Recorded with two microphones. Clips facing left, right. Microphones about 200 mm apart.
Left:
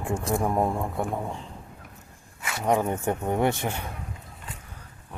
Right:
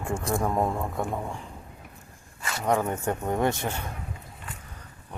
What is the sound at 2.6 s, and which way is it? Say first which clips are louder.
Speech: left 1 dB; 15° left (ahead or behind).